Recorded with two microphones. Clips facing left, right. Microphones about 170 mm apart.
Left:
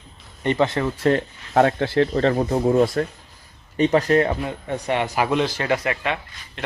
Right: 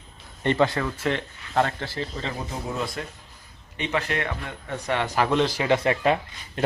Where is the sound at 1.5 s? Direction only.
55° left (ahead or behind).